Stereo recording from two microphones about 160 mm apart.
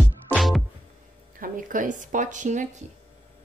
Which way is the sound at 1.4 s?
55° right (ahead or behind).